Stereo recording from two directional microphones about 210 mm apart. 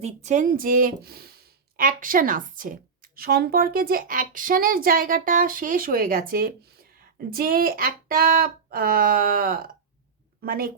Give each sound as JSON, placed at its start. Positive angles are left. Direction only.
{"t": 0.0, "sound": "speech", "side_deg": -35}